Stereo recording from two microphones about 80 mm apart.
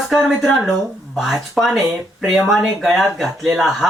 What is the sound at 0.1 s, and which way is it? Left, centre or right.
A man's voice, centre.